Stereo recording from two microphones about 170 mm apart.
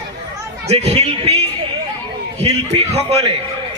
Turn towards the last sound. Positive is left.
turn(degrees=-35)  # may be behind; listen again after turning